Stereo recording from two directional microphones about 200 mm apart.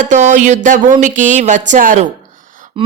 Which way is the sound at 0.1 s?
35° right (ahead or behind).